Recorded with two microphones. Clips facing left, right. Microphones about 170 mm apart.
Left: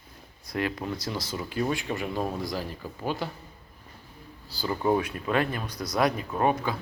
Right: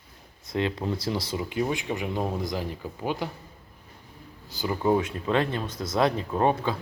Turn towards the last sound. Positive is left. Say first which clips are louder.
# right 2 dB
turn(degrees=-25)  # may be behind; listen again after turning